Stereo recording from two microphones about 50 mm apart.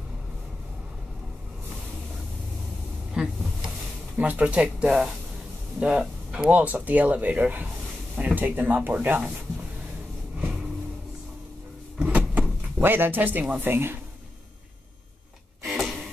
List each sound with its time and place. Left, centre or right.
3.2 s cupboard open or close: centre
4.2 s speech: right
4.8 s speech: centre
6.5 s speech: right
12.0 s power windows: right
12.8 s speech: right
15.6 s a sound: centre